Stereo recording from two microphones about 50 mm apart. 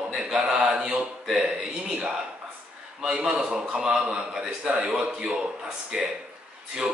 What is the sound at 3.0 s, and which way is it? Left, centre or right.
A man's voice, centre.